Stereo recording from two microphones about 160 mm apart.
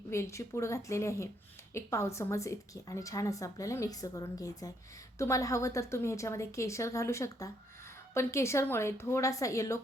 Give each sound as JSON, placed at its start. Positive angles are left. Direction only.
{"t": 0.1, "sound": "a woman's voice", "side_deg": 20}